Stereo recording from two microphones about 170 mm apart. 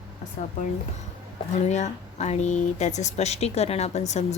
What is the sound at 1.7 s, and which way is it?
Speech, 40° left (ahead or behind).